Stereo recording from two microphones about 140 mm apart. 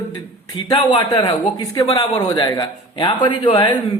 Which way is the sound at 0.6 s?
35° left (ahead or behind).